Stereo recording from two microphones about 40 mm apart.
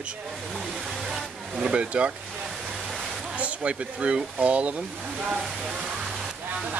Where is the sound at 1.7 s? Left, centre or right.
Right.